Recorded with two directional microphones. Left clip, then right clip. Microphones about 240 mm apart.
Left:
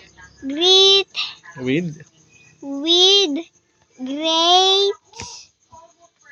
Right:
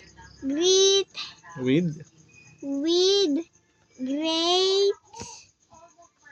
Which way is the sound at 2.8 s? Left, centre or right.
Centre.